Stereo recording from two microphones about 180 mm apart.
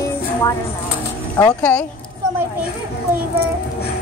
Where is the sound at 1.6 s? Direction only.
10° left (ahead or behind).